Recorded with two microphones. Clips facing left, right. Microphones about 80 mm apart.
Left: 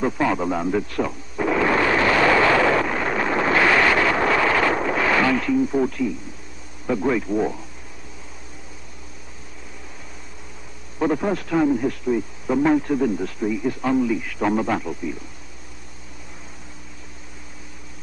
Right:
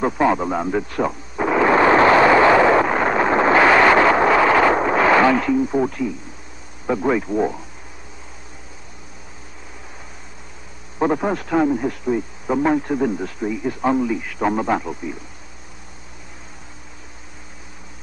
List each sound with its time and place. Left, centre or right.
0.0 s a man's voice: right
1.0 s a sound: right
2.2 s vehicle: right
5.4 s a man's voice: centre
11.0 s a man's voice: right